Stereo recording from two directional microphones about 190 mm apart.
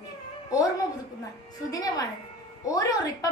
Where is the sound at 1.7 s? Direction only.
20° left (ahead or behind).